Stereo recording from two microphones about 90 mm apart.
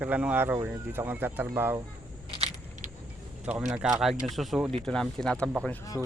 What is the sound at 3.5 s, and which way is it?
Speech, 10° right (ahead or behind).